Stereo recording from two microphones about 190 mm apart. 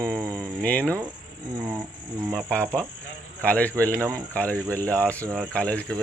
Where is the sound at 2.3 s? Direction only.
5° left (ahead or behind).